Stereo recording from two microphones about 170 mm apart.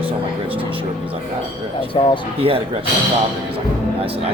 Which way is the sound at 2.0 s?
30° left (ahead or behind).